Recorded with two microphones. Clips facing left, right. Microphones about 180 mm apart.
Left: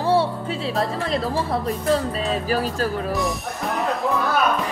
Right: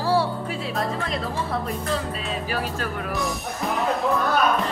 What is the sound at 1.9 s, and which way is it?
Speech, 40° left (ahead or behind).